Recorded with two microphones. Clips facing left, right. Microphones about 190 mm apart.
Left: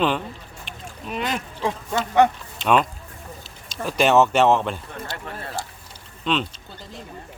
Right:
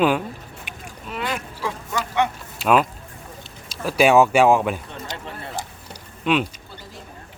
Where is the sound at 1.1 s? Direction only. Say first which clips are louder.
Left 1 dB; 20° left (ahead or behind).